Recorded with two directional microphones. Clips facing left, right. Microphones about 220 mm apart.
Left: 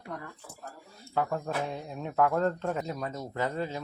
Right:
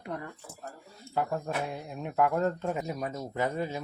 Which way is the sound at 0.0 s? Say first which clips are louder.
Right 3 dB; 20° right (ahead or behind).